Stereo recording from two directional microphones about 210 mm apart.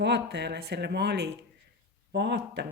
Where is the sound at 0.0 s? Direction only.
55° right (ahead or behind).